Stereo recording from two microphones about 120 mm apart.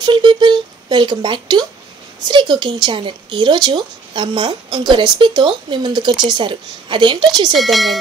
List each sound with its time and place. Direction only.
0.0 s a sound: 40° right (ahead or behind)
2.1 s a woman's voice: 40° right (ahead or behind)
7.5 s speech: centre (ahead or behind)